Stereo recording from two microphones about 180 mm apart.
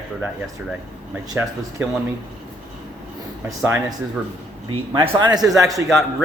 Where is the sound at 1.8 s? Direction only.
10° right (ahead or behind).